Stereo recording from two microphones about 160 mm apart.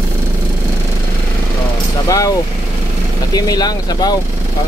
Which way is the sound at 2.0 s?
20° left (ahead or behind).